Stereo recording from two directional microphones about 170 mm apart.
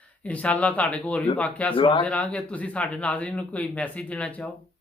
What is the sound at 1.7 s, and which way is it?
Speech, 30° left (ahead or behind).